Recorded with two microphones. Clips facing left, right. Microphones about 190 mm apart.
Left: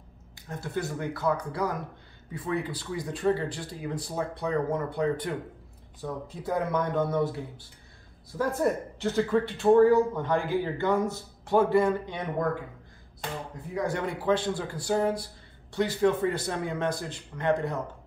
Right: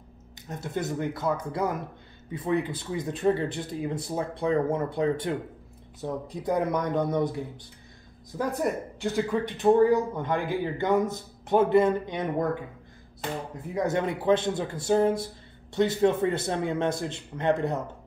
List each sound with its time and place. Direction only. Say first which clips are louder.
0.5 s speech: right 2 dB; 20° right (ahead or behind)
13.8 s speech: right 3 dB; 20° right (ahead or behind)